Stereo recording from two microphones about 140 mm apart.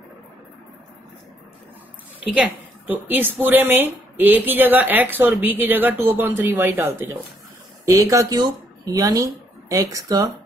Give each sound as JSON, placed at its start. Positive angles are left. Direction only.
{"t": 2.3, "sound": "speech", "side_deg": -10}